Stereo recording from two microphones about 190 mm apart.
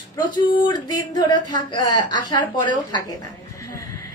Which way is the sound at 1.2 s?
25° left (ahead or behind).